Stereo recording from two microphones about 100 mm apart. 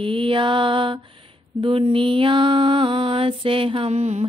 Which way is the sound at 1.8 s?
60° right (ahead or behind).